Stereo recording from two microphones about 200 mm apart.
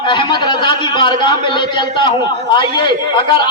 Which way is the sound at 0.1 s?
20° left (ahead or behind).